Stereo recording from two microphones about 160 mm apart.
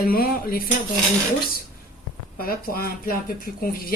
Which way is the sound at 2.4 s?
65° left (ahead or behind).